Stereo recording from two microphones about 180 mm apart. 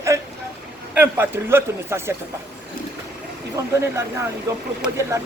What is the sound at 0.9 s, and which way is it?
A man's voice, 10° right (ahead or behind).